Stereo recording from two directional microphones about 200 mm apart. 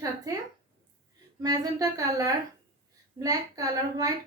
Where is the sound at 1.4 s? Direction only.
15° right (ahead or behind).